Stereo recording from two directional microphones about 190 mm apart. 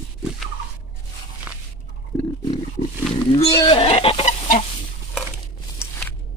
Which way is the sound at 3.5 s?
25° left (ahead or behind).